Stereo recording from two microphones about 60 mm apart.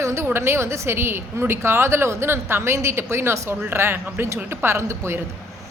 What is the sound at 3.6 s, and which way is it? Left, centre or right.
A woman's voice, right.